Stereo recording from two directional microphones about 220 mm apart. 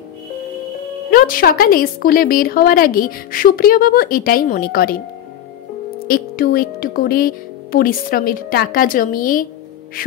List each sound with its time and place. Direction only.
1.1 s a woman's voice: 40° left (ahead or behind)
6.0 s a woman's voice: 40° left (ahead or behind)